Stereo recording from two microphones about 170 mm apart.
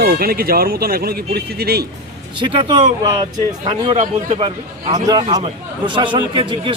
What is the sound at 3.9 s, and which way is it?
Speech, 40° right (ahead or behind).